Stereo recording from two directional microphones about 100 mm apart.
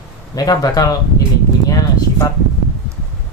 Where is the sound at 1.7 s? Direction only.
35° left (ahead or behind).